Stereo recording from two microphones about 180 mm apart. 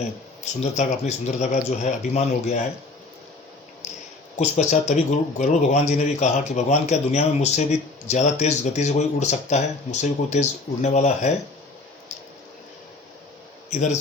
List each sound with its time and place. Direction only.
0.4 s a man's voice: 40° left (ahead or behind)
3.8 s a sound: 40° left (ahead or behind)
4.4 s a man's voice: 40° left (ahead or behind)
13.7 s a man's voice: 40° left (ahead or behind)